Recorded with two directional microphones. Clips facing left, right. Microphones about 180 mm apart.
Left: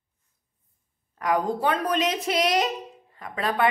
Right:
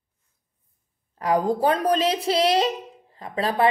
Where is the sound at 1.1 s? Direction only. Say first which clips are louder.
Right 3 dB; 30° right (ahead or behind).